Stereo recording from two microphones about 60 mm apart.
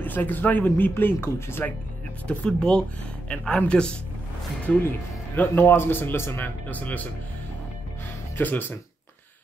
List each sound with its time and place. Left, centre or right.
0.0 s speech: left
2.2 s speech: centre
5.4 s speech: left
8.4 s speech: left